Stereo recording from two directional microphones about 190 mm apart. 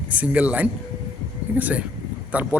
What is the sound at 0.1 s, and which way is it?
A man's voice, 5° right (ahead or behind).